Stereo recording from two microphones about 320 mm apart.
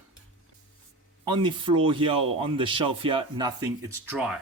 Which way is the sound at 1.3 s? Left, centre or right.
Centre.